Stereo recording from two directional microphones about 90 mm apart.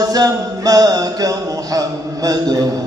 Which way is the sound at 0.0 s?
45° right (ahead or behind).